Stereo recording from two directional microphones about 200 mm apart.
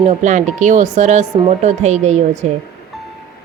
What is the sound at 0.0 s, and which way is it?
Speech, 35° right (ahead or behind).